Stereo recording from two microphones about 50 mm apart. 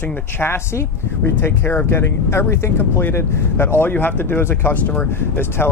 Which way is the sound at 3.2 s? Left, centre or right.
Left.